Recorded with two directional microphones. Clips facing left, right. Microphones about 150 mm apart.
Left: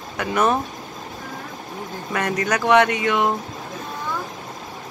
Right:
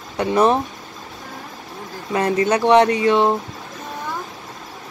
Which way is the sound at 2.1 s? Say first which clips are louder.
Right 5 dB; 25° right (ahead or behind).